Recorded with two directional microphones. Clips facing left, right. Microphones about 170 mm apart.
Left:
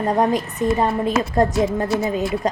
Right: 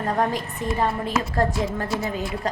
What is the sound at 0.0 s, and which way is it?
A woman's voice, 20° left (ahead or behind).